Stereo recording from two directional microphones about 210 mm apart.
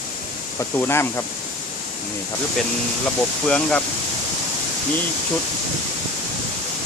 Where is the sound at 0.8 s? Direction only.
10° left (ahead or behind).